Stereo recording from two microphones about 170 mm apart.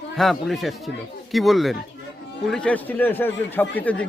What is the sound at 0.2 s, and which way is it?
Speech, centre (ahead or behind).